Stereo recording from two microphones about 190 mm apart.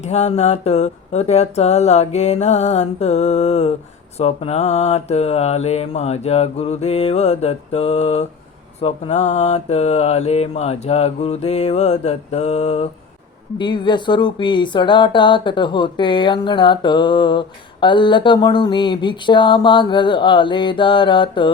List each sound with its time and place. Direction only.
0.0 s mantra: 35° left (ahead or behind)
13.6 s speech: 25° left (ahead or behind)